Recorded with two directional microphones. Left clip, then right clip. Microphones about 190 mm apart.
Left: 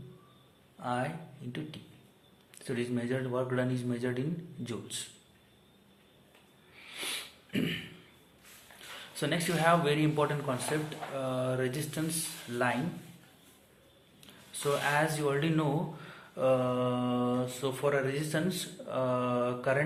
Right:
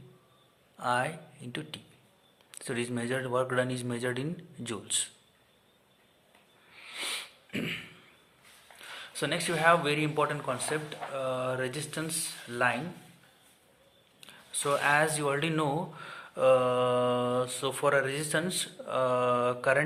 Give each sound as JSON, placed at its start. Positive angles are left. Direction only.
{"t": 0.8, "sound": "speech", "side_deg": -45}
{"t": 6.7, "sound": "sniff", "side_deg": -30}
{"t": 9.0, "sound": "speech", "side_deg": -30}
{"t": 14.2, "sound": "speech", "side_deg": -35}